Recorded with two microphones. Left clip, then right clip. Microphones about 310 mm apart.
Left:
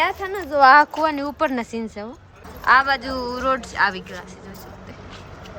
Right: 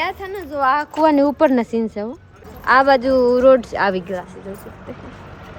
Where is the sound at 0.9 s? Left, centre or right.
Centre.